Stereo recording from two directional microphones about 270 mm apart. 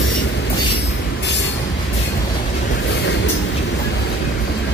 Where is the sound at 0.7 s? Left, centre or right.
Left.